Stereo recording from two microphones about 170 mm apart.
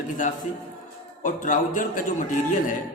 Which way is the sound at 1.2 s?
50° left (ahead or behind).